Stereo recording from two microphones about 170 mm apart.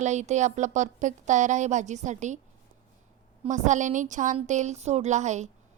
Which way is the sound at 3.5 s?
45° right (ahead or behind).